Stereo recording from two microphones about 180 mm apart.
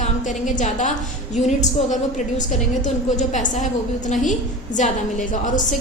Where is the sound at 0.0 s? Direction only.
45° left (ahead or behind).